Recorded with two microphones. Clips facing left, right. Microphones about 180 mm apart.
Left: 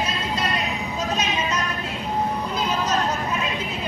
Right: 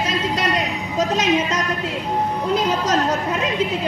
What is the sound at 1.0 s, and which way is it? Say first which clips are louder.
Speech: right 8 dB; 90° right.